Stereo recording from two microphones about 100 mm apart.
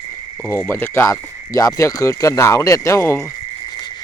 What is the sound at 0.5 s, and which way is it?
Speech, 25° left (ahead or behind).